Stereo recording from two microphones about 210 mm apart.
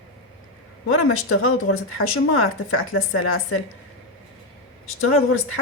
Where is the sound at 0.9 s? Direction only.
85° left.